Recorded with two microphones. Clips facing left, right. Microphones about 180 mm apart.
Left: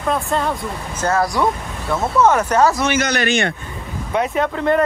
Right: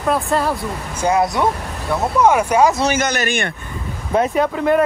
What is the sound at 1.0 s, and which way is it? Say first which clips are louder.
Speech: right 1 dB; 20° right (ahead or behind).